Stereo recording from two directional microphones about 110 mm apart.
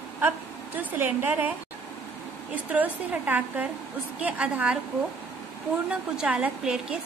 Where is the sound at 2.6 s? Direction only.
15° right (ahead or behind).